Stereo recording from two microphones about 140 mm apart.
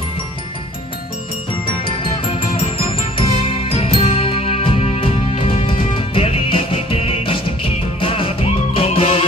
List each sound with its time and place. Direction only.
1.9 s music: 40° left (ahead or behind)